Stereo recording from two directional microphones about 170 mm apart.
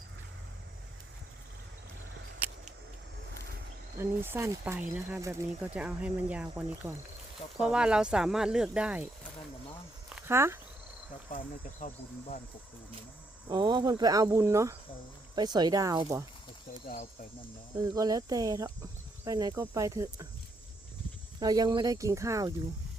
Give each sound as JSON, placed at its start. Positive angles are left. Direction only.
{"t": 3.9, "sound": "speech", "side_deg": -15}
{"t": 10.2, "sound": "speech", "side_deg": -15}
{"t": 11.3, "sound": "speech", "side_deg": 55}
{"t": 13.5, "sound": "speech", "side_deg": -25}
{"t": 17.8, "sound": "speech", "side_deg": -20}
{"t": 21.4, "sound": "speech", "side_deg": -20}